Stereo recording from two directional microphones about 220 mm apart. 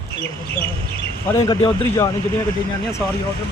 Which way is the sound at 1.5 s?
20° left (ahead or behind).